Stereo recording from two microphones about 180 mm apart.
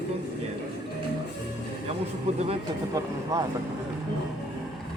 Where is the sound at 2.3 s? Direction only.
35° right (ahead or behind).